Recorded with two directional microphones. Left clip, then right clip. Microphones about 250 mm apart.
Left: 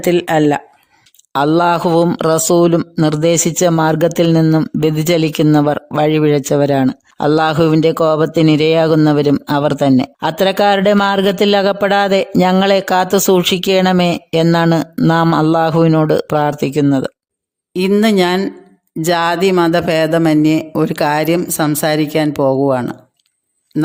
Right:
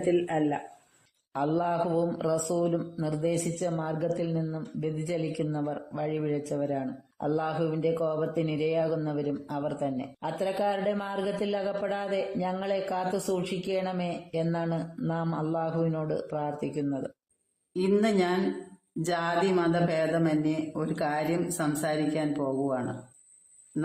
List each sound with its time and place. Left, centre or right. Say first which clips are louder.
0.1 s speech: left 15 dB; left